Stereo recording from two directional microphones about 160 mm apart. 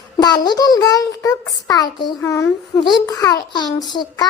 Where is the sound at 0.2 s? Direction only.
25° left (ahead or behind).